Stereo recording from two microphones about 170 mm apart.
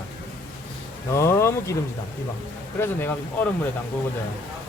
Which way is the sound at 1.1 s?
15° left (ahead or behind).